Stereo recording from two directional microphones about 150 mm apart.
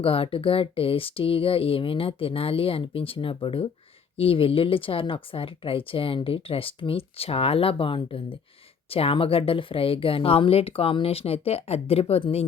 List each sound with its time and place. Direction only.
0.0 s speech: 35° left (ahead or behind)